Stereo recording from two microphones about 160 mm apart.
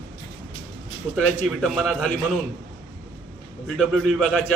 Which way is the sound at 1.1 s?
5° right (ahead or behind).